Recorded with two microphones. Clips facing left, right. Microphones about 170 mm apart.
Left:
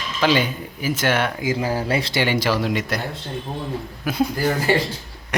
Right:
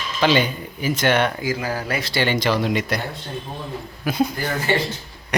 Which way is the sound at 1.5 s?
25° left (ahead or behind).